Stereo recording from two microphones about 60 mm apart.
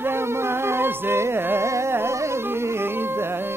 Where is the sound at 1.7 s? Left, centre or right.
Right.